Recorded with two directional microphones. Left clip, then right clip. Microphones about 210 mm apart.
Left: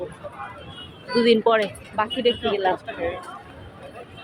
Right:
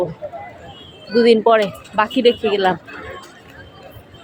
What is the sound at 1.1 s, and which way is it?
Speech, 20° right (ahead or behind).